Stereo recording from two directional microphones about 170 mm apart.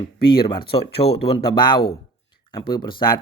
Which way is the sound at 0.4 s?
30° left (ahead or behind).